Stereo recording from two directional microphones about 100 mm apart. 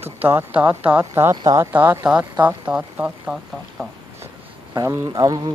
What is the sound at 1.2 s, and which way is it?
Speech, 30° right (ahead or behind).